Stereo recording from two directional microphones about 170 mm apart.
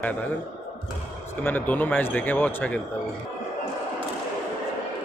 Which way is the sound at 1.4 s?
10° left (ahead or behind).